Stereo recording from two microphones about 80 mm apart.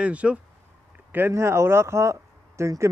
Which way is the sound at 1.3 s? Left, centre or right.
Right.